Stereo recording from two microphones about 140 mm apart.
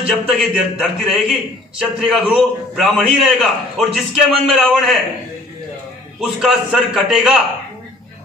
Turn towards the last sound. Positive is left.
turn(degrees=-5)  # may be behind; listen again after turning